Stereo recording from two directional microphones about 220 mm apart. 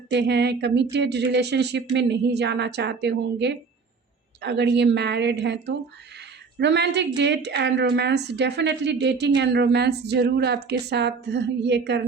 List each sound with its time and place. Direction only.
0.1 s speech: 50° right (ahead or behind)